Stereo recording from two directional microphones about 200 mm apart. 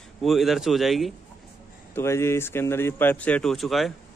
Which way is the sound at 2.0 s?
15° left (ahead or behind).